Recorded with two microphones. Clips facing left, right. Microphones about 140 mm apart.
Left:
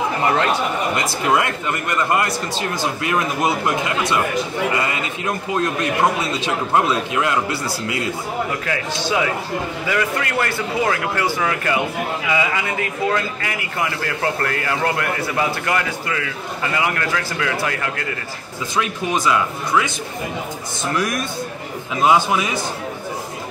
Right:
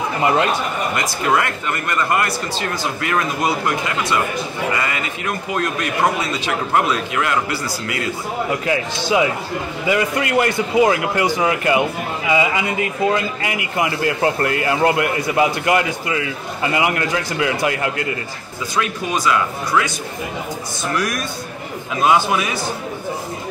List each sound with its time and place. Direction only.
0.9 s speech: 20° left (ahead or behind)
5.2 s speech: 25° left (ahead or behind)
8.5 s a man's voice: 15° right (ahead or behind)
18.8 s speech: 20° left (ahead or behind)
22.0 s speech: 20° left (ahead or behind)